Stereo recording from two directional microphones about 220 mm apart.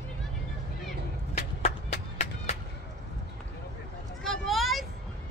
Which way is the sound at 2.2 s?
30° left (ahead or behind).